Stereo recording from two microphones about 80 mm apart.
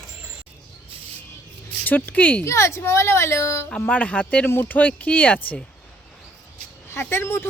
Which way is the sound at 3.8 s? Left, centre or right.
Centre.